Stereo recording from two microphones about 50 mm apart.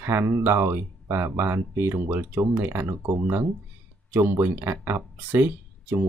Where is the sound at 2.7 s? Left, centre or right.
Right.